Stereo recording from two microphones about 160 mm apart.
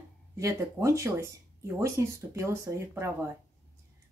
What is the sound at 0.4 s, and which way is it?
Speech, 20° right (ahead or behind).